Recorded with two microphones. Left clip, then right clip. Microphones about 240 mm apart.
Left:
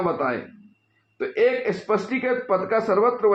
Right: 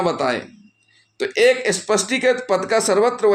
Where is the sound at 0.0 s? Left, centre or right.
Right.